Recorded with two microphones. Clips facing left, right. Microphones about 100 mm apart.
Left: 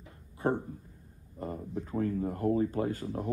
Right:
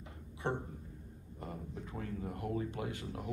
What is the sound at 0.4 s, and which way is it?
Speech, 40° left (ahead or behind).